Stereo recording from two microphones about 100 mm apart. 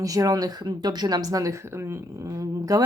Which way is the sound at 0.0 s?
35° right (ahead or behind).